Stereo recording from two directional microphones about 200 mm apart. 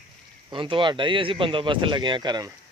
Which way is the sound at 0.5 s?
25° right (ahead or behind).